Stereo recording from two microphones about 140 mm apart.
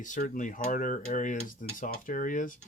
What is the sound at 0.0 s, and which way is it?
Speech, 65° left (ahead or behind).